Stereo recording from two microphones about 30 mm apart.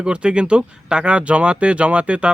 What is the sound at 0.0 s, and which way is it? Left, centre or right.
Speech, right.